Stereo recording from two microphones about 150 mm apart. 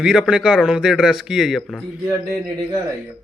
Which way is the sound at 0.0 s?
5° right (ahead or behind).